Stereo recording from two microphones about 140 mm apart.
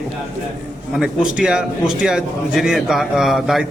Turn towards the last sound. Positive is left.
turn(degrees=0)  # may be behind; listen again after turning